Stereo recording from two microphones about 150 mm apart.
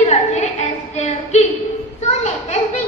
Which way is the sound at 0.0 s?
50° left (ahead or behind).